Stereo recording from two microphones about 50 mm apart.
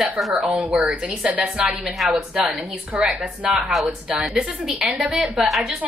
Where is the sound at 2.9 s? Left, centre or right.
Right; by 5.8 s centre.